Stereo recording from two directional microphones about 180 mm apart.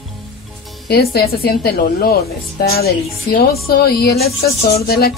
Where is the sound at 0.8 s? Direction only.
60° left (ahead or behind).